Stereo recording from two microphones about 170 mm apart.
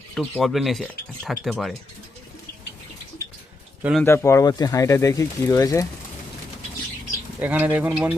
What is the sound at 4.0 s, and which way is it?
Speech, 15° left (ahead or behind).